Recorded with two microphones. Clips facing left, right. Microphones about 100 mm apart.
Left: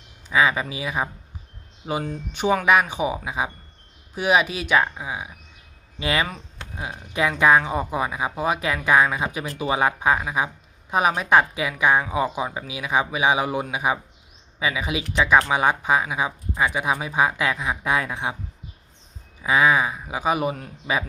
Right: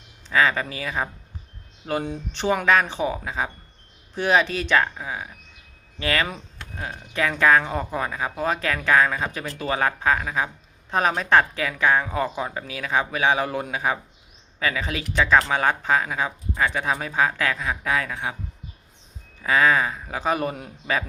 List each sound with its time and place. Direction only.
0.3 s speech: 10° left (ahead or behind)
19.4 s speech: 15° left (ahead or behind)